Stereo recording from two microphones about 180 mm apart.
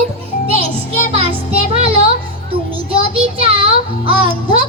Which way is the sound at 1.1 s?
35° right (ahead or behind).